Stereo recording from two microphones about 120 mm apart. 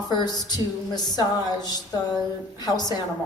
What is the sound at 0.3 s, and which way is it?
Speech, 35° left (ahead or behind).